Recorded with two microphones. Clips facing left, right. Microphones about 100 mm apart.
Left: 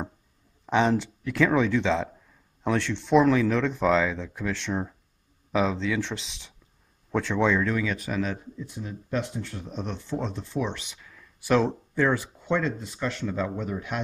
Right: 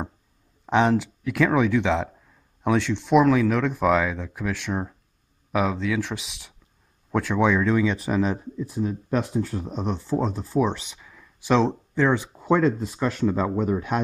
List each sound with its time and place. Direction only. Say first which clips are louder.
0.7 s speech: right 3 dB; 15° right (ahead or behind); by 9.8 s 35° right (ahead or behind)
10.1 s speech: right 5 dB; 5° right (ahead or behind)
10.4 s speech: right 7 dB; 35° right (ahead or behind)
11.0 s a sound: right 2 dB; 10° right (ahead or behind)
11.5 s speech: right 2 dB; 5° left (ahead or behind)
12.5 s speech: right 6 dB; 5° right (ahead or behind)
13.2 s speech: right 6 dB; 35° right (ahead or behind)